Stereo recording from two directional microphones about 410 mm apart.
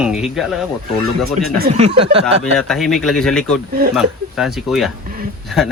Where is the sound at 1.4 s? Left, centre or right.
Right.